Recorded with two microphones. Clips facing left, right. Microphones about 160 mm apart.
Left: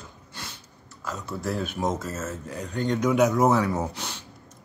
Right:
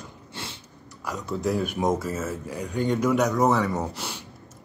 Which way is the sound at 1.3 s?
15° right (ahead or behind).